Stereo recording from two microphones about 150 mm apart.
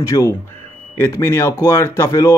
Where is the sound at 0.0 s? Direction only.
20° left (ahead or behind).